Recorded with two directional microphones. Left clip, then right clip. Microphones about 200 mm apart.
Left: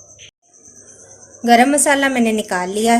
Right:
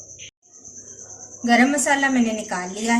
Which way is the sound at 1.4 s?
45° left (ahead or behind).